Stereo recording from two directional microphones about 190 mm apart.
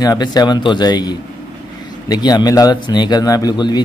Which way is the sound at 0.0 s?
20° left (ahead or behind).